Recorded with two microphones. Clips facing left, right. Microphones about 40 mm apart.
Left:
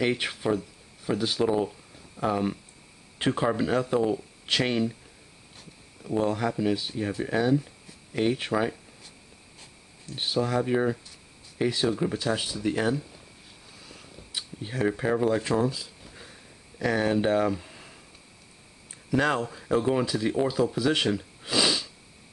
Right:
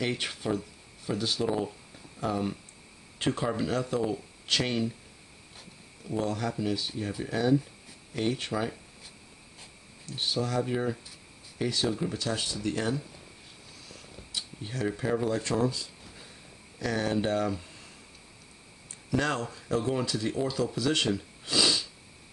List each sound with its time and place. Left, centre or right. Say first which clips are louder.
0.0 s speech: left 5 dB; centre
6.0 s speech: left 5 dB; centre
10.0 s speech: left 3 dB; centre
13.8 s a sound: left 1 dB; centre
16.7 s speech: left 4 dB; centre
19.0 s speech: left 4 dB; centre